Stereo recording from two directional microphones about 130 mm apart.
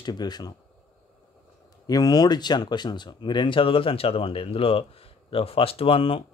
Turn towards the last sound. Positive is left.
turn(degrees=45)  # may be behind; listen again after turning